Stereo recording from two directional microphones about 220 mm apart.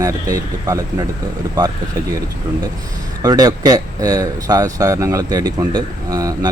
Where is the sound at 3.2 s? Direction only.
15° right (ahead or behind).